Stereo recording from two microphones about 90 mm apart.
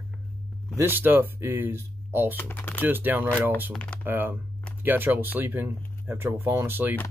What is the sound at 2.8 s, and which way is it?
Speech, 20° right (ahead or behind).